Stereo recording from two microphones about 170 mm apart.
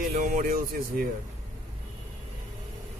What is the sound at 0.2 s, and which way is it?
Speech, 55° right (ahead or behind).